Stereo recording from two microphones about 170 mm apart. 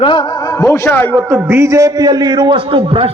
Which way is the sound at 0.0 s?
30° left (ahead or behind).